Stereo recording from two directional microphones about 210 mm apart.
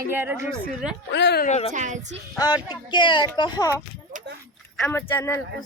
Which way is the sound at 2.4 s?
20° left (ahead or behind).